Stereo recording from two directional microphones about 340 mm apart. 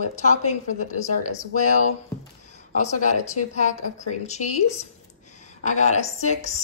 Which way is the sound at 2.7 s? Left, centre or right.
Centre.